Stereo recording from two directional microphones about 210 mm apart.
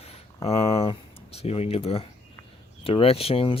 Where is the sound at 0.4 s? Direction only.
30° left (ahead or behind).